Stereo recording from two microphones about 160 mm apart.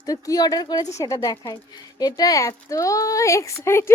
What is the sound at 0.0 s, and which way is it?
A woman's voice, 20° left (ahead or behind).